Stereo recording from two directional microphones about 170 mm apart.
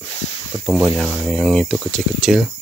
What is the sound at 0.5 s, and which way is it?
Speech, 25° right (ahead or behind).